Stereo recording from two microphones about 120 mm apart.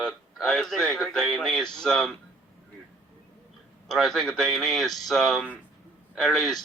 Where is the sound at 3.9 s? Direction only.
Centre (ahead or behind).